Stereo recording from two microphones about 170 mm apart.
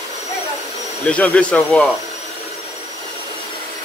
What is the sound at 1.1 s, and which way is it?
Speech, 5° left (ahead or behind).